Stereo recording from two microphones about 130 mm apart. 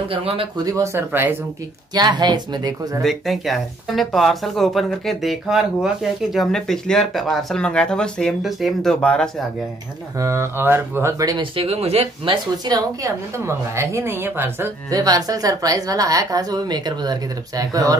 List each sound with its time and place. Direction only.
0.1 s speech: 45° right (ahead or behind)
0.7 s a woman's voice: 20° right (ahead or behind)
2.0 s speech: 35° right (ahead or behind)
3.0 s speech: centre (ahead or behind)
10.1 s a woman's voice: 25° right (ahead or behind)
11.5 s speech: 50° right (ahead or behind)
12.6 s a woman's voice: 25° right (ahead or behind)
14.9 s a woman's voice: 30° right (ahead or behind)